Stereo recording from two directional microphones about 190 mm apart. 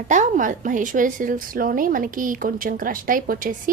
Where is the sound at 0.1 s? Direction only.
40° right (ahead or behind).